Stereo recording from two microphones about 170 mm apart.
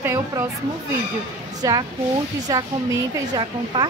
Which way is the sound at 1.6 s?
20° right (ahead or behind).